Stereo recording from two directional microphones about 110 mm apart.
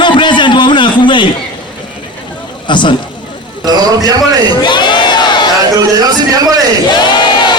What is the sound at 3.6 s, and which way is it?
Speech, 35° right (ahead or behind).